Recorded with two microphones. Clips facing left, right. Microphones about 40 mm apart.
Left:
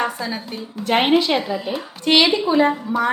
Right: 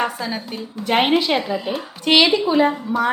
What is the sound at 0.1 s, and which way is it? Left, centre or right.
A woman's voice, centre.